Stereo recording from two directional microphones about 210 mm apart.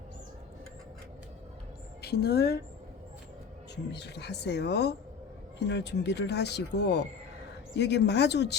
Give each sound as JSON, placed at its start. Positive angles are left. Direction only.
{"t": 2.0, "sound": "a woman's voice", "side_deg": 50}
{"t": 3.9, "sound": "speech", "side_deg": 55}